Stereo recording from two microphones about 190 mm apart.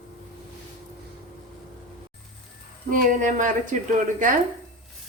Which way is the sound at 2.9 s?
45° right (ahead or behind).